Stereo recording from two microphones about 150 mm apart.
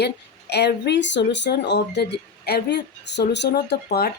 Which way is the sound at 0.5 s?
90° left.